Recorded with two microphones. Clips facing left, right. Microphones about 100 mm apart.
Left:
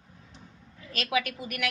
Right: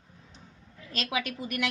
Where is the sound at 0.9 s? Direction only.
25° right (ahead or behind).